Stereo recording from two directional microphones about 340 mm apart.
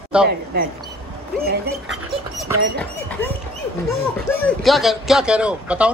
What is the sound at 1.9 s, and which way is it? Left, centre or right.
Speech, centre.